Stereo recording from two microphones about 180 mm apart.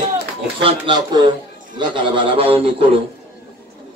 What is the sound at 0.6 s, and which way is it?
A man's voice, 30° right (ahead or behind).